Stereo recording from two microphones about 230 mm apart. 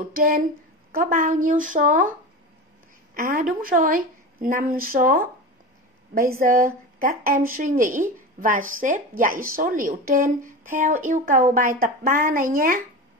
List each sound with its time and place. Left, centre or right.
0.9 s speech: right
3.2 s speech: right
6.4 s speech: right